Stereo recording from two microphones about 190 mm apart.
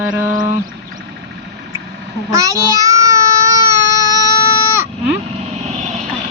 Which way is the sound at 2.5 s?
15° right (ahead or behind).